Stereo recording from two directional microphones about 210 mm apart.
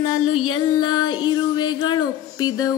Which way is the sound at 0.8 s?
20° left (ahead or behind).